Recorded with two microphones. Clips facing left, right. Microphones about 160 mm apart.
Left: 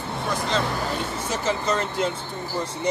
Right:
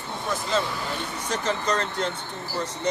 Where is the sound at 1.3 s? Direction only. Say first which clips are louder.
Left 1 dB; 5° left (ahead or behind).